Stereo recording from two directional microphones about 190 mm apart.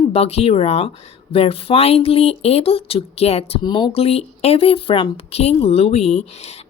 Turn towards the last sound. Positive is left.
turn(degrees=35)  # may be behind; listen again after turning